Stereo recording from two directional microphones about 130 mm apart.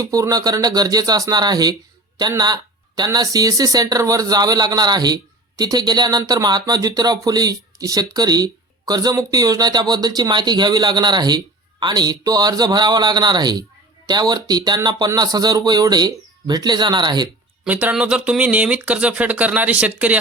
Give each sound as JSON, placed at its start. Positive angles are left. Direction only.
{"t": 0.0, "sound": "speech", "side_deg": -25}
{"t": 17.7, "sound": "speech", "side_deg": -10}